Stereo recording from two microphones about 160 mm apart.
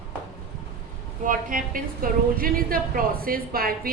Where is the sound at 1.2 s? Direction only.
60° right (ahead or behind).